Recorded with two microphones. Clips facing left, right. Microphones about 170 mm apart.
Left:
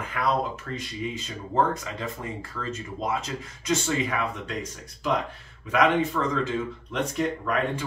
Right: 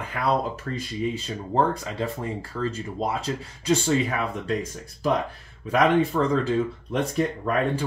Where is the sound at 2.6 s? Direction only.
30° right (ahead or behind).